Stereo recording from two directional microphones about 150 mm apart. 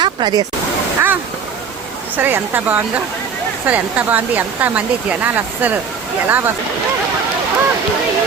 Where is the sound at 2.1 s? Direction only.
15° right (ahead or behind).